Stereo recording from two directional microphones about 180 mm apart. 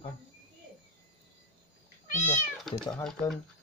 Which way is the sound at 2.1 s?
45° left (ahead or behind).